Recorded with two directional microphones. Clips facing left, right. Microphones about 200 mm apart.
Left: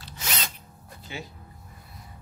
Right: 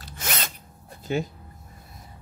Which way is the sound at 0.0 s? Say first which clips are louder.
Right 2 dB; 50° right (ahead or behind).